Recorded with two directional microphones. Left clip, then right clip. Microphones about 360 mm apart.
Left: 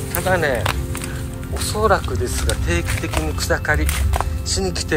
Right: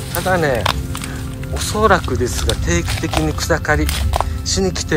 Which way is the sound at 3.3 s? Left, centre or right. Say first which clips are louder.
Right 1 dB; centre.